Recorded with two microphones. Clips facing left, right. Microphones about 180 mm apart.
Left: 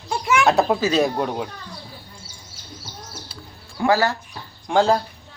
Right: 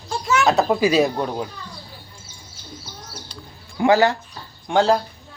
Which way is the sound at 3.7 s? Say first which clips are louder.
Right 3 dB; 20° right (ahead or behind).